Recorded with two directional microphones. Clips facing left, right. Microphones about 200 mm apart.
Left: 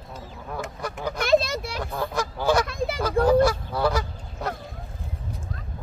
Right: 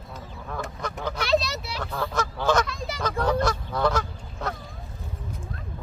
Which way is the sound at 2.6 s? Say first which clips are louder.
Left 6 dB; 55° left (ahead or behind).